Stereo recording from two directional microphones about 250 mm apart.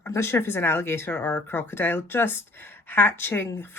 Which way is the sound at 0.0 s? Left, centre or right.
Centre.